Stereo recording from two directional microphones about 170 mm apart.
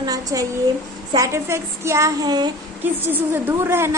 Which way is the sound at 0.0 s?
20° right (ahead or behind).